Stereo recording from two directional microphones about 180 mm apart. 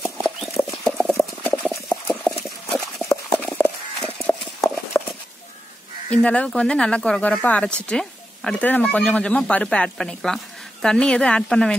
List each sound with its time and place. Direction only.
0.0 s clip-clop: 10° left (ahead or behind)
4.9 s a sound: 15° left (ahead or behind)
6.0 s speech: 5° left (ahead or behind)